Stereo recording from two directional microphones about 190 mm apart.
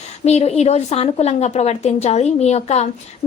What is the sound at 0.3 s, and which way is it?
A woman's voice, 35° left (ahead or behind).